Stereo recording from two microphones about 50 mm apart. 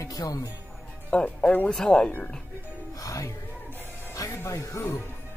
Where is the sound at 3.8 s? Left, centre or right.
Left.